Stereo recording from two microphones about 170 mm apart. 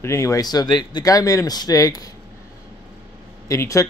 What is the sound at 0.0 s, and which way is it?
Speech, 15° left (ahead or behind).